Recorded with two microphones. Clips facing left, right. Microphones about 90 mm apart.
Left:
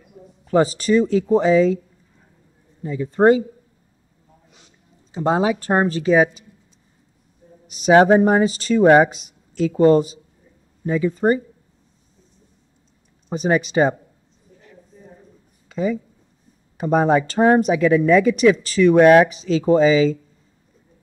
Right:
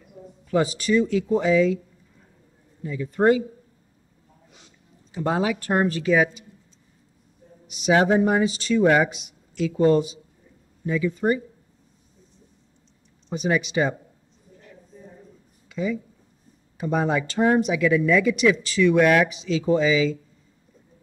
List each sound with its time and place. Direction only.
0.5 s speech: 35° left (ahead or behind)
2.8 s speech: 30° left (ahead or behind)
5.1 s speech: 25° left (ahead or behind)
7.6 s speech: 40° left (ahead or behind)
13.3 s speech: 40° left (ahead or behind)
15.7 s speech: 40° left (ahead or behind)